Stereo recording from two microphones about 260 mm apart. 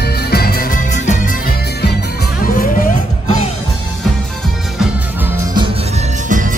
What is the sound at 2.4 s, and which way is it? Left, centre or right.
Music, left.